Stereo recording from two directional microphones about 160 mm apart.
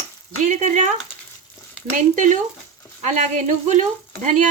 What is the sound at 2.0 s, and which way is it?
Speech, 50° right (ahead or behind).